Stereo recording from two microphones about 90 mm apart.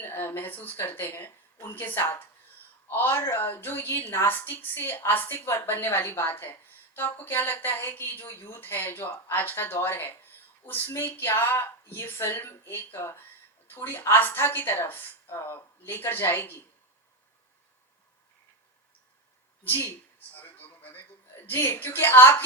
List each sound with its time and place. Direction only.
0.1 s a woman's voice: 25° left (ahead or behind)
19.6 s a woman's voice: 25° left (ahead or behind)
20.3 s a sound: 20° left (ahead or behind)
21.5 s a woman's voice: 25° left (ahead or behind)